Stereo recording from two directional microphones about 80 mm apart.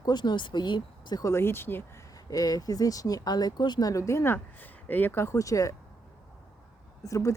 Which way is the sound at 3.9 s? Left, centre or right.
Left.